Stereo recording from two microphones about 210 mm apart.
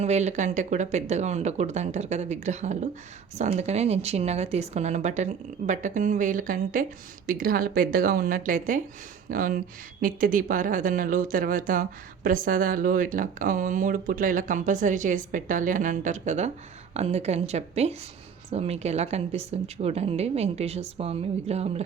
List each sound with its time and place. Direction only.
0.0 s speech: 30° right (ahead or behind)